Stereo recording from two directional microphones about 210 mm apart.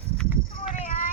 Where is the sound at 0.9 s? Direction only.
35° left (ahead or behind).